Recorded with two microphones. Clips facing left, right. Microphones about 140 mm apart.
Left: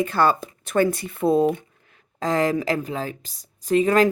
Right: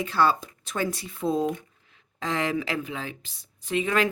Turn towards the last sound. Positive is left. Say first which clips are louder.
# left 7 dB
turn(degrees=40)  # may be behind; listen again after turning